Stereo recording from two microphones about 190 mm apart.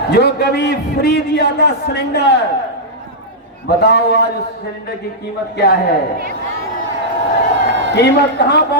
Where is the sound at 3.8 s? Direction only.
65° left (ahead or behind).